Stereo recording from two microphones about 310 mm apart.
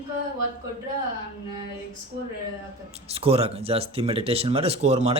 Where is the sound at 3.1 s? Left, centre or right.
Centre.